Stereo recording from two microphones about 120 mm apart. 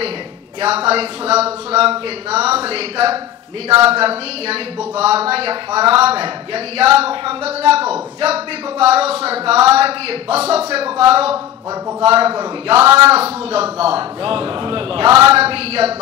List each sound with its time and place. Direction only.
0.6 s speech: 55° right (ahead or behind)
12.8 s speech: 25° right (ahead or behind)
13.1 s a man's voice: 55° right (ahead or behind)